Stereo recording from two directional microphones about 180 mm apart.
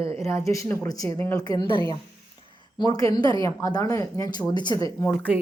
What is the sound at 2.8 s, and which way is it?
Speech, 20° left (ahead or behind).